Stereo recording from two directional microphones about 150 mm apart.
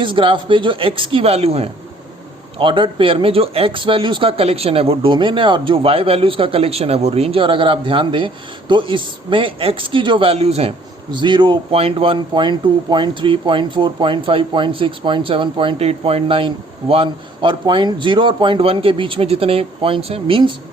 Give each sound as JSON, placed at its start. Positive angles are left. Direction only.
{"t": 0.0, "sound": "speech", "side_deg": -35}